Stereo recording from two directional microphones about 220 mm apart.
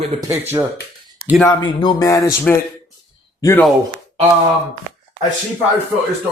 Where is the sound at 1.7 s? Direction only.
20° left (ahead or behind).